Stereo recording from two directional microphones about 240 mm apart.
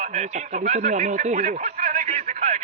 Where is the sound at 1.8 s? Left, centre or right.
Right.